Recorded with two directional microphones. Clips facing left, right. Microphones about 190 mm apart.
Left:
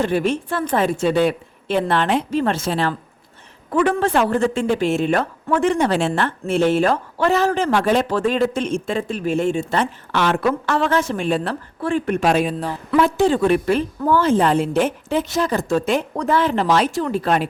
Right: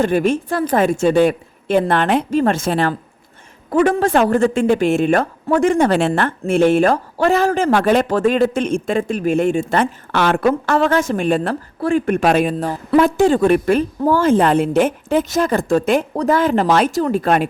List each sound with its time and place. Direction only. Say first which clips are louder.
0.0 s a man's voice: right 3 dB; 45° right (ahead or behind)
16.1 s a man's voice: right 3 dB; 40° right (ahead or behind)